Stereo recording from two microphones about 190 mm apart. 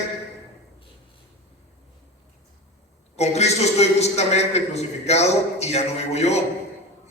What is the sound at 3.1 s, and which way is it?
A man's voice, 35° left (ahead or behind).